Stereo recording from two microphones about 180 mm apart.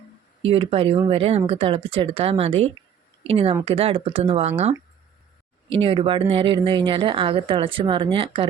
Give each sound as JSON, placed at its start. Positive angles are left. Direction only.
{"t": 0.4, "sound": "speech", "side_deg": -30}
{"t": 5.7, "sound": "speech", "side_deg": -30}